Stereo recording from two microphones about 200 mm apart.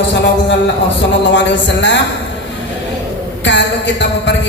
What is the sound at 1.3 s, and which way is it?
Speech, 60° left (ahead or behind).